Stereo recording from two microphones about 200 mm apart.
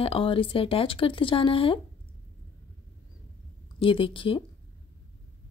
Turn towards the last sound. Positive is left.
turn(degrees=25)  # may be behind; listen again after turning